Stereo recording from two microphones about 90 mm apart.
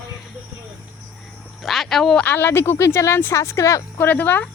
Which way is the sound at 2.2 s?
25° left (ahead or behind).